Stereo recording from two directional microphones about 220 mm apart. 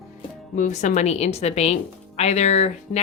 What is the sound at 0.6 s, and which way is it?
Speech, 35° left (ahead or behind).